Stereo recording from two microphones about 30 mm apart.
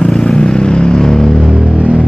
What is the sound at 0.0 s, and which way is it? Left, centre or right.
Vehicle, left.